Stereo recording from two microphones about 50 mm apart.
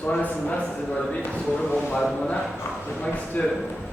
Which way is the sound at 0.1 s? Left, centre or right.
Left.